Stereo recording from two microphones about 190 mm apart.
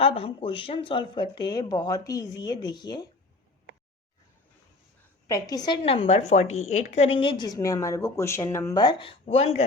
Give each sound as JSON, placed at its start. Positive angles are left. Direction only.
{"t": 0.0, "sound": "a woman's voice", "side_deg": 30}
{"t": 5.3, "sound": "a woman's voice", "side_deg": 20}